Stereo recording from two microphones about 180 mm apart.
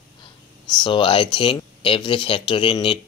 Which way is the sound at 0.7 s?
25° left (ahead or behind).